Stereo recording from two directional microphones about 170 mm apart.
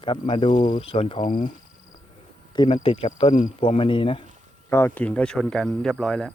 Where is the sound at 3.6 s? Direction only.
30° left (ahead or behind).